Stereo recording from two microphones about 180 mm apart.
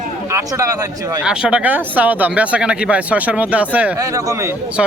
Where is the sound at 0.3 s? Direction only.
15° right (ahead or behind).